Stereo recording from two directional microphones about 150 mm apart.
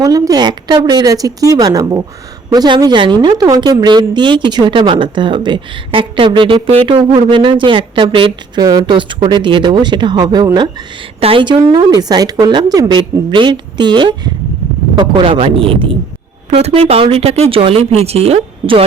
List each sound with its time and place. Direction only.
0.0 s a woman's voice: 25° right (ahead or behind)